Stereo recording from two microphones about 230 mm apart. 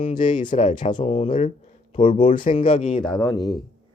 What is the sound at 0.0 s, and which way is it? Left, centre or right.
A man's voice, left.